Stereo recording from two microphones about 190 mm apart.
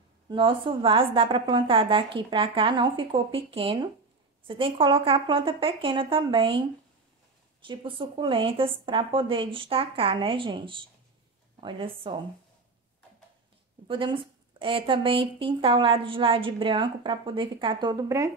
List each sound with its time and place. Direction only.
0.3 s a woman's voice: 25° right (ahead or behind)
7.6 s a woman's voice: 25° right (ahead or behind)
13.8 s a woman's voice: 25° right (ahead or behind)